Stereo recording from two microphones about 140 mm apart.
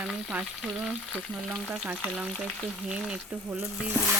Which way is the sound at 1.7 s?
10° right (ahead or behind).